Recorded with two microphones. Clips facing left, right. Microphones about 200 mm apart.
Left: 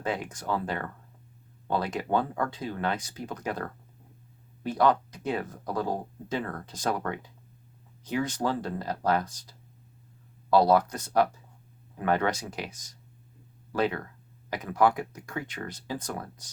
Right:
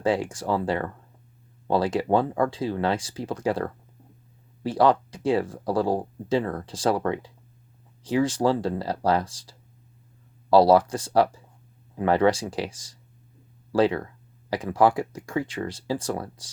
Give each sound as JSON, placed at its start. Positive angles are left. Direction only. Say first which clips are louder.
{"t": 0.0, "sound": "speech", "louder": "right 8 dB", "side_deg": -30}
{"t": 4.7, "sound": "speech", "louder": "right 4 dB", "side_deg": -30}
{"t": 10.5, "sound": "speech", "louder": "right 5 dB", "side_deg": -30}